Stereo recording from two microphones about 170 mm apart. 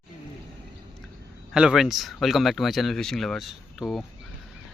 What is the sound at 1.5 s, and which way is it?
Speech, 5° right (ahead or behind).